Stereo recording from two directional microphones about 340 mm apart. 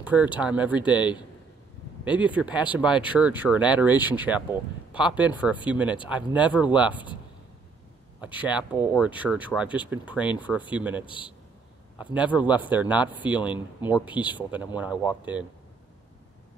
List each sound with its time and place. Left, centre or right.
0.0 s speech: centre
8.2 s speech: centre
11.1 s a man's voice: centre
12.0 s speech: centre
13.8 s a man's voice: centre
14.3 s speech: centre